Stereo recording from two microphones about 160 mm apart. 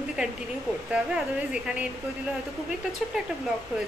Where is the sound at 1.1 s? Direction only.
5° right (ahead or behind).